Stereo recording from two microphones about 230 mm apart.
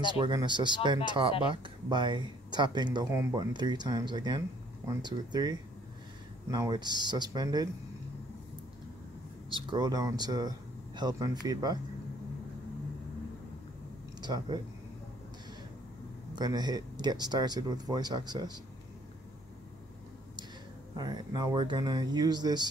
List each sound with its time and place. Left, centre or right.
0.1 s speech: centre
9.7 s speech: centre
14.2 s speech: centre
16.3 s speech: centre
20.9 s speech: centre